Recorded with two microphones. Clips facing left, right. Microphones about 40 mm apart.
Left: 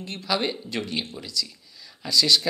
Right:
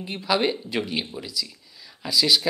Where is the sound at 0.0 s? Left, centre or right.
Centre.